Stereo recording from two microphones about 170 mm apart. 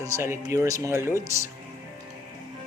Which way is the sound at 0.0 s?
15° right (ahead or behind).